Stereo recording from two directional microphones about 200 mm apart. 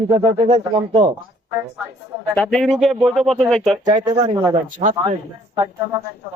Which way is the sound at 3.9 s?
20° right (ahead or behind).